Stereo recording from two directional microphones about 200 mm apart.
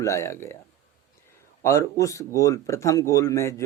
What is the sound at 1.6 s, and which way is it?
Speech, 15° left (ahead or behind).